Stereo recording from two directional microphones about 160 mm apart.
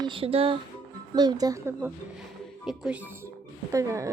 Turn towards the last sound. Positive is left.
turn(degrees=-20)  # may be behind; listen again after turning